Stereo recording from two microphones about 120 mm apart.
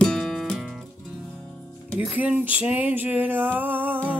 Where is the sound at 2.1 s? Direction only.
15° right (ahead or behind).